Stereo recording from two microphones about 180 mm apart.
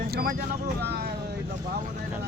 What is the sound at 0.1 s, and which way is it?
Speech, 60° right (ahead or behind).